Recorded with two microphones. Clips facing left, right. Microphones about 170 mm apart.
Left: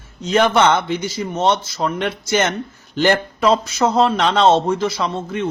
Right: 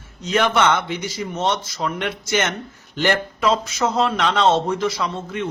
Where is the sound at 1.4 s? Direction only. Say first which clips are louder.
Left 5 dB; 35° left (ahead or behind).